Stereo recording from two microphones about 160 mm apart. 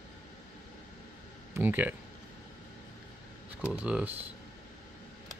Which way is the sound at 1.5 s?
15° right (ahead or behind).